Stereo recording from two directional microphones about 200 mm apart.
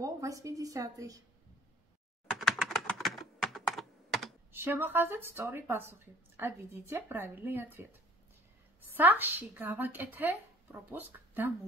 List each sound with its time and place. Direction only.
0.0 s a woman's voice: 15° right (ahead or behind)
2.3 s computer keyboard: centre (ahead or behind)
4.5 s a woman's voice: 10° right (ahead or behind)
8.9 s a woman's voice: 10° right (ahead or behind)